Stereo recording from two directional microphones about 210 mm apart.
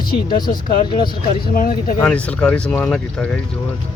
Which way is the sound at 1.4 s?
45° left (ahead or behind).